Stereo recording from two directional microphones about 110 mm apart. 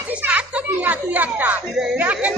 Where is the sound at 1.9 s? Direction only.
15° right (ahead or behind).